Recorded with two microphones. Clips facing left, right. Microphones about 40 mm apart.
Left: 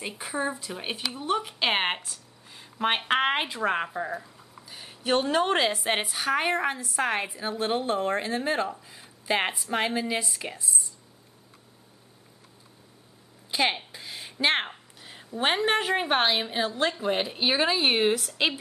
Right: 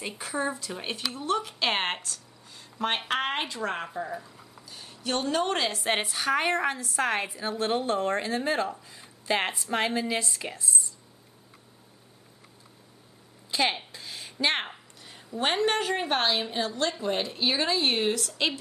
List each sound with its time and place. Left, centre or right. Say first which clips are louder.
0.2 s a woman's voice: even; centre
13.5 s a sound: left 1 dB; centre
15.1 s speech: left 1 dB; centre